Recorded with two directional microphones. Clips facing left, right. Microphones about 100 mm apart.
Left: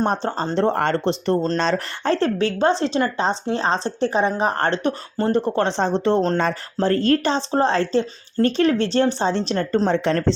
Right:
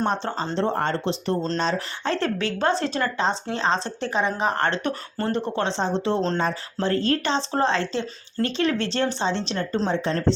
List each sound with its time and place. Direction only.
0.5 s speech: 60° left (ahead or behind)
2.0 s speech: 35° left (ahead or behind)
5.3 s speech: 50° left (ahead or behind)
9.9 s speech: 70° left (ahead or behind)